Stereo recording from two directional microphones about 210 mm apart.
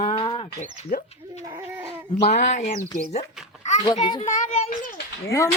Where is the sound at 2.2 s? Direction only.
35° left (ahead or behind).